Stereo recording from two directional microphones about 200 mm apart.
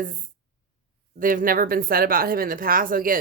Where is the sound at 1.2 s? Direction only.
45° right (ahead or behind).